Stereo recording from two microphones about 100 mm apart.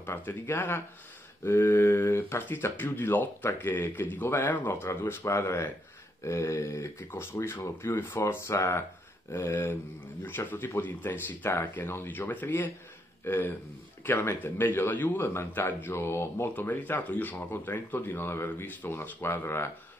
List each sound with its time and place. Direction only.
0.0 s a man's voice: 20° left (ahead or behind)